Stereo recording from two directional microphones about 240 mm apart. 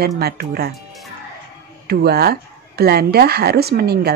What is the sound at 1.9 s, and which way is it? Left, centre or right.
A woman's voice, right.